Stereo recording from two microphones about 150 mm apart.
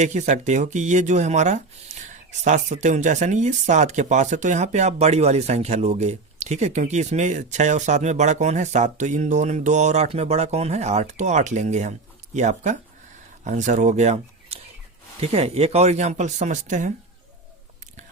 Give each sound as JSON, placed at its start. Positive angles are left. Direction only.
{"t": 0.0, "sound": "speech", "side_deg": -50}